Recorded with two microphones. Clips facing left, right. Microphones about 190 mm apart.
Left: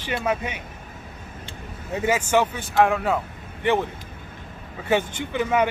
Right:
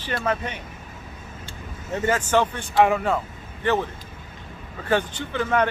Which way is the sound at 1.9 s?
10° left (ahead or behind).